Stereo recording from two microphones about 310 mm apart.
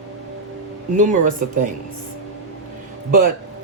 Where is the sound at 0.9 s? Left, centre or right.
Right.